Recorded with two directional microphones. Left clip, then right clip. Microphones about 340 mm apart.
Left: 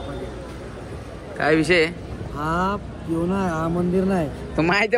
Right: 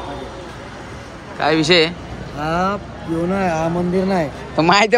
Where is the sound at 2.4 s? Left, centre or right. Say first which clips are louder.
Right 4 dB; right.